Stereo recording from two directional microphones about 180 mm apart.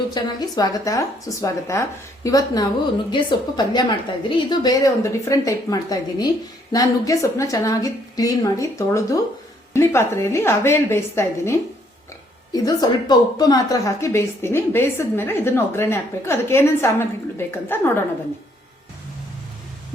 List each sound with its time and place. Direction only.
0.1 s a woman's voice: 20° left (ahead or behind)
12.5 s a woman's voice: 20° left (ahead or behind)